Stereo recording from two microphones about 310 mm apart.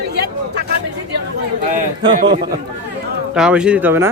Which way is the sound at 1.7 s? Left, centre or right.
Right.